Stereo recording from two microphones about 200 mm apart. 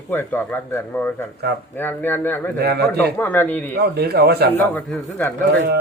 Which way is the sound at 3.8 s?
55° right (ahead or behind).